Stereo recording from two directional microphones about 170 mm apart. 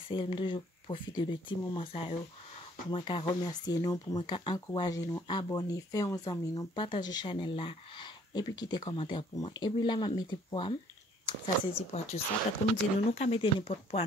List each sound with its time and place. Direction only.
0.1 s speech: 30° left (ahead or behind)